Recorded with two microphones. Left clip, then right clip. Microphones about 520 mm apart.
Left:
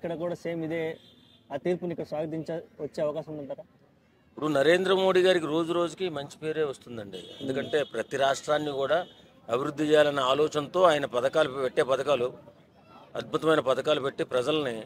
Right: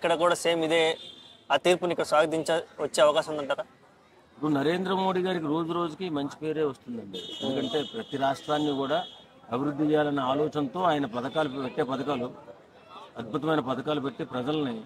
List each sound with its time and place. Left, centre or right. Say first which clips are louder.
0.0 s a man's voice: right 9 dB; right
4.5 s a man's voice: left 4 dB; left
7.7 s a man's voice: left 3 dB; left
9.5 s a man's voice: left 2 dB; left
13.2 s a man's voice: left 3 dB; left